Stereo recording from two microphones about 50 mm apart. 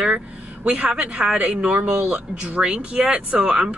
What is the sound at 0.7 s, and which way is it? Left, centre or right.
Speech, right.